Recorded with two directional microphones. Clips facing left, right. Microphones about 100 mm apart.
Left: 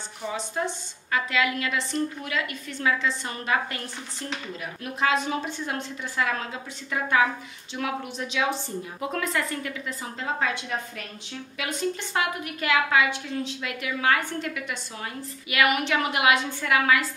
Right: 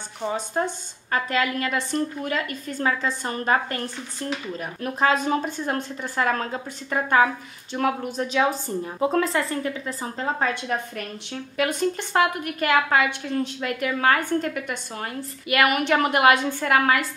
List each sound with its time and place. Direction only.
0.3 s a woman's voice: 40° right (ahead or behind)